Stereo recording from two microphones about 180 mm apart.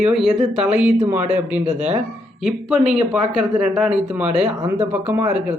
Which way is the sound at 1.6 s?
40° right (ahead or behind).